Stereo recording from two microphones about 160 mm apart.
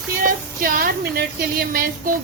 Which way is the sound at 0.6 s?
65° right (ahead or behind).